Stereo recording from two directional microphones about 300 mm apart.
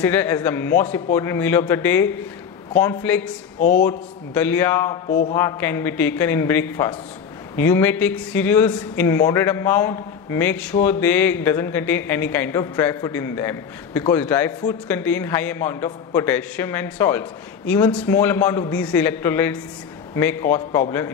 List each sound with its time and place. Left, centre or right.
0.0 s a man's voice: centre
3.5 s speech: left
3.8 s a man's voice: centre